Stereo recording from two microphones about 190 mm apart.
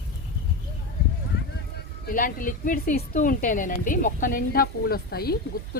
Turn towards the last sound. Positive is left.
turn(degrees=55)  # may be behind; listen again after turning